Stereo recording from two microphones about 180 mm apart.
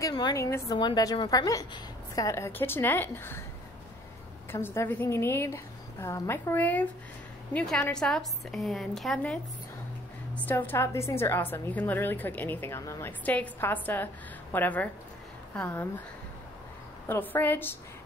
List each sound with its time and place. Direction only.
0.0 s a woman's voice: 20° left (ahead or behind)
4.5 s a woman's voice: 15° left (ahead or behind)
17.1 s a woman's voice: 10° left (ahead or behind)